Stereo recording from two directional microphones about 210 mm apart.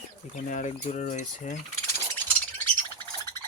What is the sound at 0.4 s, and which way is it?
Rodents, 35° left (ahead or behind).